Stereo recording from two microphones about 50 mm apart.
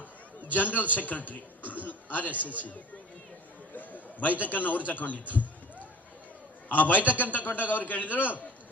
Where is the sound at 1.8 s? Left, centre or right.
Left.